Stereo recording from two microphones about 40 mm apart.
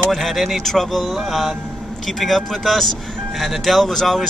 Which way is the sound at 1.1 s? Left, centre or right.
Centre.